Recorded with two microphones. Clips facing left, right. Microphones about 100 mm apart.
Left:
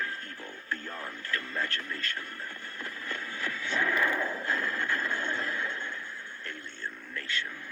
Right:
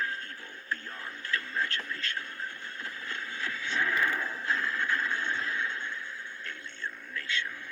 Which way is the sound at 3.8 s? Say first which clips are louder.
Left 2 dB; 65° left (ahead or behind).